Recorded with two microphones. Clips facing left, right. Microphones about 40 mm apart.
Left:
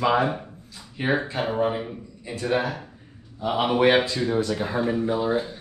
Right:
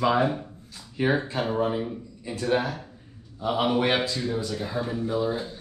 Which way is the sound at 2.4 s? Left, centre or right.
Centre.